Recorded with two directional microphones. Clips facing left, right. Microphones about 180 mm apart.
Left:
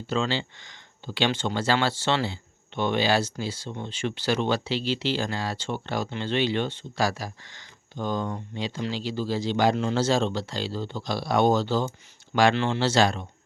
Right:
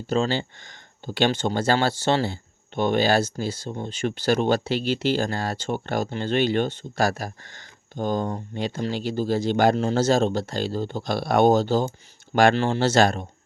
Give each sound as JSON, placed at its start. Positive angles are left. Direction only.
{"t": 0.1, "sound": "speech", "side_deg": -45}